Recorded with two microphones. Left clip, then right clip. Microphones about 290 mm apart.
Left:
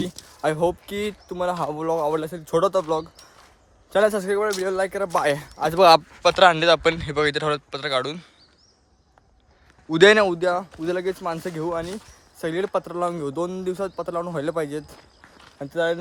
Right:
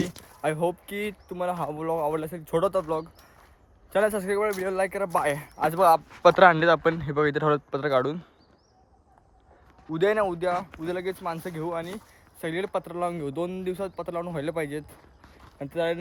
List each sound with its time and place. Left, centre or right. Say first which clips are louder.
0.4 s speech: left 5 dB; centre
5.7 s a man's voice: left 6 dB; left
6.2 s speech: even; centre
10.0 s a man's voice: left 9 dB; left
10.3 s speech: left 4 dB; centre